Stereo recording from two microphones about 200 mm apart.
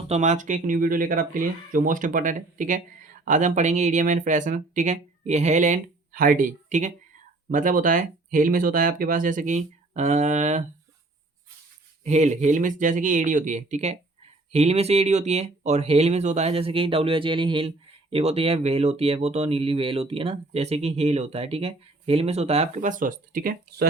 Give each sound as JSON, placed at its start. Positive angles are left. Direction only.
{"t": 0.1, "sound": "speech", "side_deg": -35}
{"t": 12.0, "sound": "speech", "side_deg": -35}